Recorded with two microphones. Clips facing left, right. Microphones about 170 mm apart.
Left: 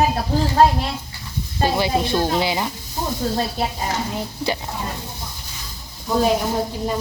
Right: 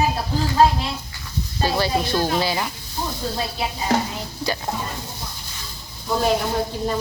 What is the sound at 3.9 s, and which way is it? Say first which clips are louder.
Speech: right 5 dB; 60° right (ahead or behind).